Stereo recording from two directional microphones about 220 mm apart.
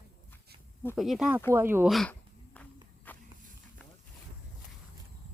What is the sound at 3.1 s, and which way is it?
Walk, 10° left (ahead or behind).